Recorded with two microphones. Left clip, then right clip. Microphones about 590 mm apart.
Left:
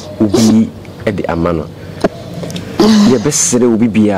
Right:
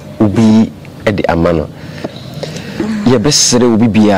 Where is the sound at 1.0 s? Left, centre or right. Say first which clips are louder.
Right 3 dB; centre.